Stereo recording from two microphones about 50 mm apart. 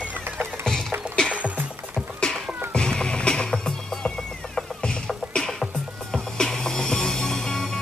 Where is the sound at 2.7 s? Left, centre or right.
Centre.